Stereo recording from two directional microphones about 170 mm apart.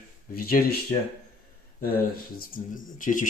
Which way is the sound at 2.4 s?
55° left (ahead or behind).